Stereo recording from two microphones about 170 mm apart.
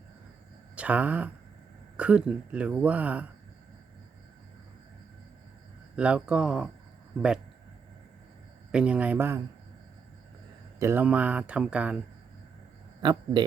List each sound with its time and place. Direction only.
0.8 s speech: 10° right (ahead or behind)
6.0 s speech: 5° right (ahead or behind)
8.7 s speech: 5° right (ahead or behind)
10.8 s speech: 15° right (ahead or behind)
13.0 s speech: 25° right (ahead or behind)